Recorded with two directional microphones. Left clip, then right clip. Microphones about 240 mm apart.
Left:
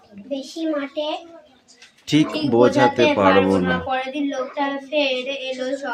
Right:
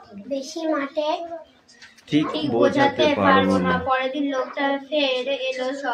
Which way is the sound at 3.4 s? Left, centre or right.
Centre.